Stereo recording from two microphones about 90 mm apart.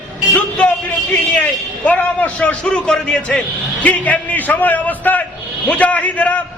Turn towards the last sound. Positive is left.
turn(degrees=15)  # may be behind; listen again after turning